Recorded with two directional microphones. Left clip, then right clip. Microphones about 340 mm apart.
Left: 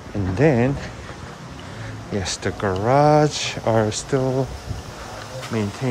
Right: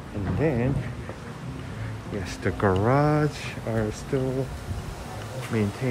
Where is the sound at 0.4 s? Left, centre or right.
Left.